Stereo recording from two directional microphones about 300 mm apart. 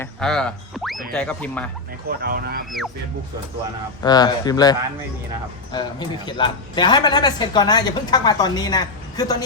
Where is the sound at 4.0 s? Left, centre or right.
Centre.